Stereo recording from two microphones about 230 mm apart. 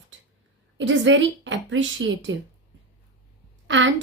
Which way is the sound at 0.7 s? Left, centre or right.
Right.